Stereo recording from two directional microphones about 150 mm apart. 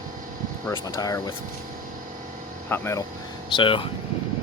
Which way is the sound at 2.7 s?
15° left (ahead or behind).